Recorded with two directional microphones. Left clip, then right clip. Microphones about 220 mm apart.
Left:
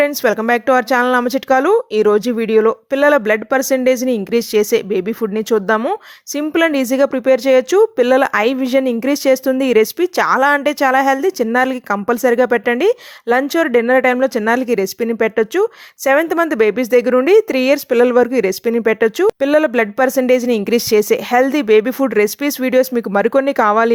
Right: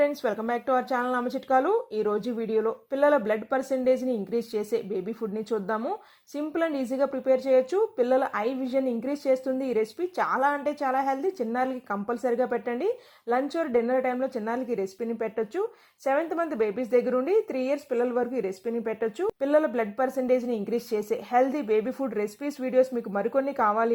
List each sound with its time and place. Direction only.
0.0 s speech: 30° left (ahead or behind)